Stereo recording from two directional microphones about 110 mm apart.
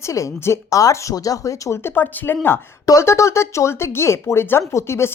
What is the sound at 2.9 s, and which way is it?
Speech, 25° left (ahead or behind).